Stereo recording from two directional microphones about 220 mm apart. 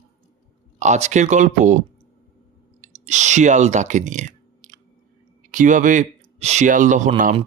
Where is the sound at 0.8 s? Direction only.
30° right (ahead or behind).